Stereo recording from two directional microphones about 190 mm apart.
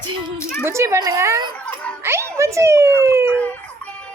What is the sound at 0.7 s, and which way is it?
Speech, 15° right (ahead or behind).